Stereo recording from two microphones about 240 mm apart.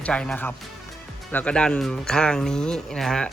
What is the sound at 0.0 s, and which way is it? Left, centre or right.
Speech, centre.